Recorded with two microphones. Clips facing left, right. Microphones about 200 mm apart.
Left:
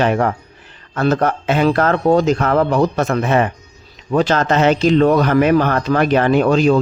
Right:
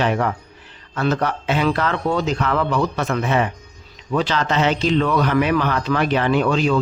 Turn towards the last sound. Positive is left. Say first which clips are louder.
# left 5 dB
turn(degrees=45)  # may be behind; listen again after turning